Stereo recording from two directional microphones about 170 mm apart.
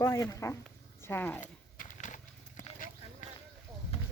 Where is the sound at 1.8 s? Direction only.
50° left (ahead or behind).